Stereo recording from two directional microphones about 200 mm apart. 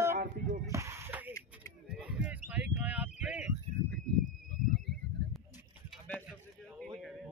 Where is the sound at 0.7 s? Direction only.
15° right (ahead or behind).